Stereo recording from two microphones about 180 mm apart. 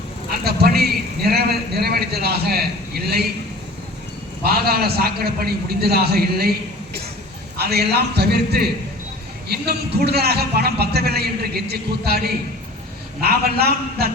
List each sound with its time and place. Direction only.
0.4 s a man's voice: 60° right (ahead or behind)
4.4 s a man's voice: 60° right (ahead or behind)
7.6 s a man's voice: 60° right (ahead or behind)